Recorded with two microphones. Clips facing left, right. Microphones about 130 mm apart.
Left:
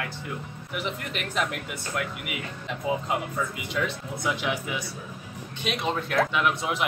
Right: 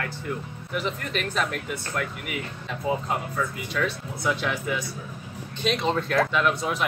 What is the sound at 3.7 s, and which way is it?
Speech, 15° left (ahead or behind).